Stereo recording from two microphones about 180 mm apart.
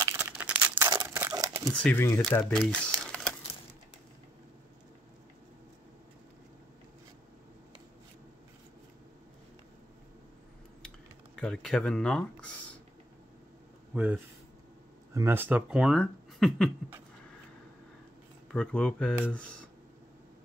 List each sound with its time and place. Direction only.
0.0 s crumpling: 10° right (ahead or behind)
1.7 s speech: 5° left (ahead or behind)
11.3 s speech: 5° left (ahead or behind)
13.9 s speech: 10° right (ahead or behind)
18.5 s speech: 5° left (ahead or behind)